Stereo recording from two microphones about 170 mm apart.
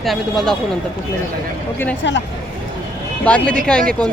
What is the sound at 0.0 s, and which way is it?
Speech, centre (ahead or behind).